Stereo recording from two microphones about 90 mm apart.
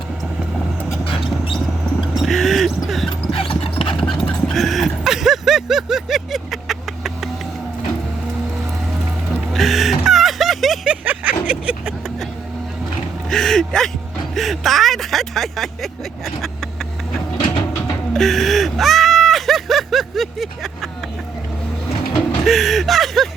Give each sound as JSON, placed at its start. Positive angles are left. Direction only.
{"t": 2.1, "sound": "a sound", "side_deg": 0}
{"t": 3.1, "sound": "music", "side_deg": 85}
{"t": 4.3, "sound": "a sound", "side_deg": 5}
{"t": 9.5, "sound": "music", "side_deg": 0}
{"t": 11.0, "sound": "vehicle", "side_deg": -15}
{"t": 13.3, "sound": "speech", "side_deg": 5}
{"t": 18.1, "sound": "speech", "side_deg": 0}
{"t": 22.4, "sound": "speech", "side_deg": 0}